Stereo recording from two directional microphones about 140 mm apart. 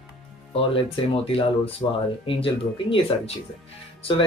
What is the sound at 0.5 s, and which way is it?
Speech, 45° left (ahead or behind).